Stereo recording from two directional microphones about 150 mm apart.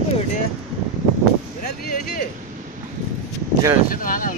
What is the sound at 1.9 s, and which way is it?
Speech, 90° left.